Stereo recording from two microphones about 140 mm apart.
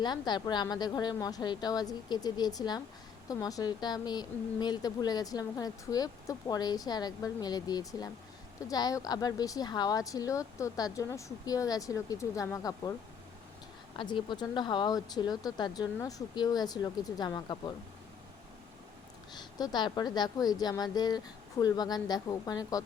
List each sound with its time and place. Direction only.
0.0 s a woman's voice: 30° left (ahead or behind)
13.9 s a woman's voice: 35° left (ahead or behind)
19.4 s a woman's voice: 30° left (ahead or behind)